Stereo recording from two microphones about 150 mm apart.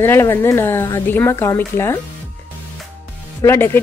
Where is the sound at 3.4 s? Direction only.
15° left (ahead or behind).